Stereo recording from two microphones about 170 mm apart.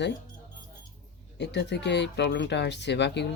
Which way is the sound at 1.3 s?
90° left.